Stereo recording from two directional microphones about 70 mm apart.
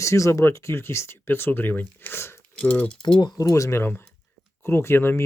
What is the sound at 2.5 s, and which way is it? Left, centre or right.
Speech, left.